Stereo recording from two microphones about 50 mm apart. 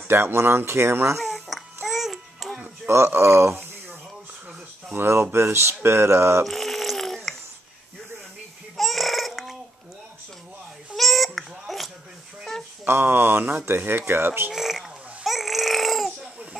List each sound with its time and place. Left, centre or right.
0.1 s speech: right
1.1 s a sound: centre
1.9 s music: centre
2.9 s speech: right
4.9 s speech: right
6.4 s a sound: centre
8.7 s baby cry: centre
11.0 s a sound: centre
12.8 s speech: right
14.5 s babbling: centre